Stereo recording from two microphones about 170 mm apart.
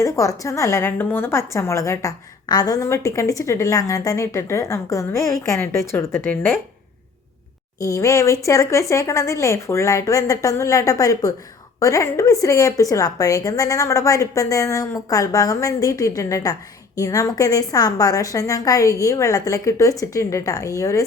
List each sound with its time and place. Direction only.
0.0 s a woman's voice: 20° left (ahead or behind)
7.8 s a woman's voice: 20° left (ahead or behind)